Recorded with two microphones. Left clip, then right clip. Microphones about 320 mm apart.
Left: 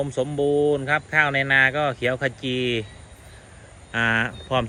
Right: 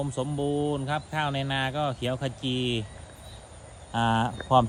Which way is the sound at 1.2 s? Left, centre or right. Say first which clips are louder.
Left 13 dB; centre.